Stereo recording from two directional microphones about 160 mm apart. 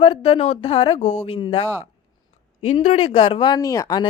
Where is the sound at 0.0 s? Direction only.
35° left (ahead or behind).